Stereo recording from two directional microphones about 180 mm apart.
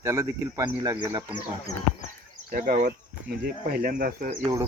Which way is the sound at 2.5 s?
55° right (ahead or behind).